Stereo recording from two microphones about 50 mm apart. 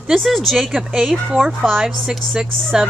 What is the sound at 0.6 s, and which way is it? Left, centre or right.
A woman's voice, centre.